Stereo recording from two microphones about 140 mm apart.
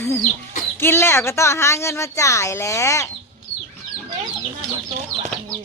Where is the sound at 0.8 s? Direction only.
15° left (ahead or behind).